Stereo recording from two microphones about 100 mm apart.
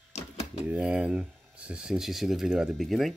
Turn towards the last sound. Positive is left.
turn(degrees=0)  # may be behind; listen again after turning